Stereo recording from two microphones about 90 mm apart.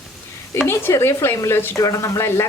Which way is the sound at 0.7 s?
30° left (ahead or behind).